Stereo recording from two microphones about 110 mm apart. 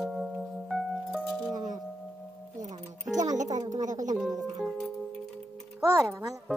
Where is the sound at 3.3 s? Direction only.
90° right.